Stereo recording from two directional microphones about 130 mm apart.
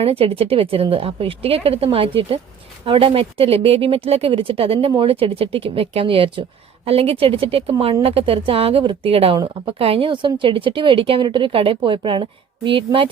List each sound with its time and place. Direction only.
0.0 s a woman's voice: 45° right (ahead or behind)